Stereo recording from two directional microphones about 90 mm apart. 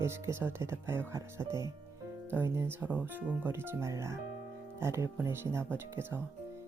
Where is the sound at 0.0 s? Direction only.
30° right (ahead or behind).